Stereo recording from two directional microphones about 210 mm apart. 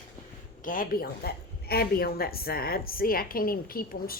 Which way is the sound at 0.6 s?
40° left (ahead or behind).